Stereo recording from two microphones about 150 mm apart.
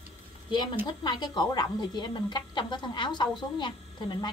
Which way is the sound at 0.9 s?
30° left (ahead or behind).